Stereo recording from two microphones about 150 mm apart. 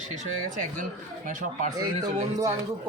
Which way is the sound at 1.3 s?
60° right (ahead or behind).